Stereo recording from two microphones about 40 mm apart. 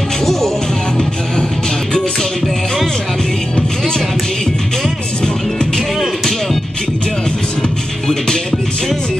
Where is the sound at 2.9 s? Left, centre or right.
Centre.